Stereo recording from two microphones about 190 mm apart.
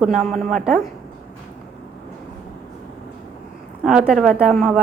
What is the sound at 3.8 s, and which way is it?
A woman's voice, centre (ahead or behind).